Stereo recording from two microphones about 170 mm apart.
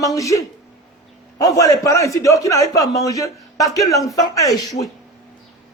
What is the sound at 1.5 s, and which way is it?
A man's voice, 20° left (ahead or behind).